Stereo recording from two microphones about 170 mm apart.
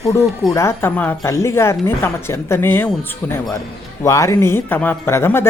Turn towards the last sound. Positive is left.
turn(degrees=15)  # may be behind; listen again after turning